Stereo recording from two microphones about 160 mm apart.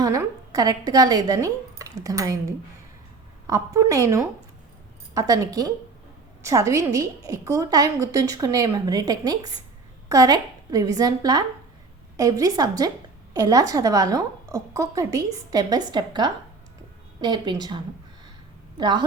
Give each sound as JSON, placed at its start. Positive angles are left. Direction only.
{"t": 0.0, "sound": "a woman's voice", "side_deg": -20}